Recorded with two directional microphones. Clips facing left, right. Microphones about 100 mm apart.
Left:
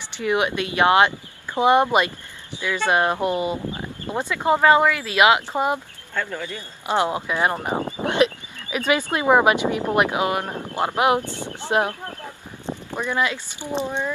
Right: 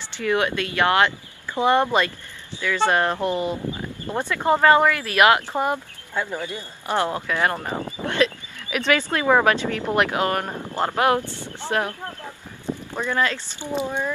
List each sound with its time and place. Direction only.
0.2 s speech: 20° left (ahead or behind)
6.1 s a man's voice: 15° right (ahead or behind)
6.9 s speech: 15° left (ahead or behind)
11.3 s a sound: 15° left (ahead or behind)
12.6 s speech: 15° left (ahead or behind)